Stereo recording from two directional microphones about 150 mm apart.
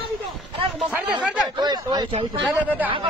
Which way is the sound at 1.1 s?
30° right (ahead or behind).